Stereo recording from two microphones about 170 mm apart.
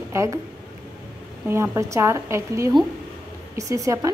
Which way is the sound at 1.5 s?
15° right (ahead or behind).